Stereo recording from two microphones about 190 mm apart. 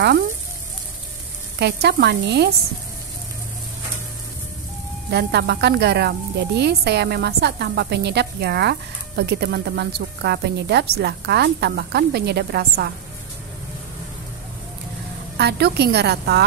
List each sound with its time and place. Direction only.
1.6 s speech: 60° right (ahead or behind)
5.1 s speech: 60° right (ahead or behind)
15.3 s speech: 60° right (ahead or behind)